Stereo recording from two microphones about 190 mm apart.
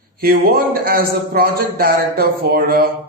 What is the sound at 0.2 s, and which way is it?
A man's voice, 50° right (ahead or behind).